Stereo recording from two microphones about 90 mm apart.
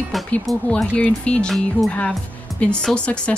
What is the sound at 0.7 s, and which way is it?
Speech, 15° left (ahead or behind).